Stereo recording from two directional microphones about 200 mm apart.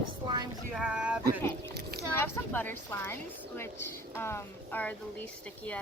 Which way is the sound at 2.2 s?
10° left (ahead or behind).